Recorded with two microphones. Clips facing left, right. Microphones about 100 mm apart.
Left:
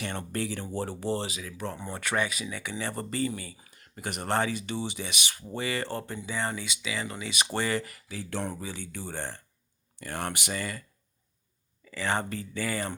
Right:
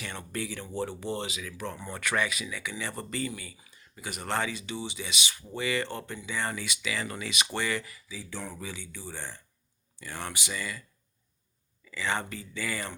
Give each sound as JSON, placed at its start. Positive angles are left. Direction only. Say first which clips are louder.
{"t": 0.0, "sound": "speech", "louder": "left 4 dB", "side_deg": 45}
{"t": 3.7, "sound": "a sound", "louder": "left 4 dB", "side_deg": 55}
{"t": 4.3, "sound": "speech", "louder": "left 3 dB", "side_deg": 40}
{"t": 7.3, "sound": "speech", "louder": "left 3 dB", "side_deg": 35}
{"t": 7.9, "sound": "speech", "louder": "left 4 dB", "side_deg": 65}
{"t": 11.9, "sound": "speech", "louder": "left 2 dB", "side_deg": 40}